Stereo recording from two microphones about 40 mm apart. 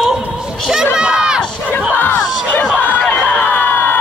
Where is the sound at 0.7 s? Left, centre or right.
Centre.